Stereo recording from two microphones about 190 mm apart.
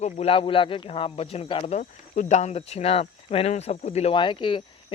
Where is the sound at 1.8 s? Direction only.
40° left (ahead or behind).